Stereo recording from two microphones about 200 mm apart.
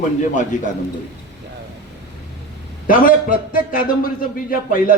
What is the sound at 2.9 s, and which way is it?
A man's voice, 45° left (ahead or behind).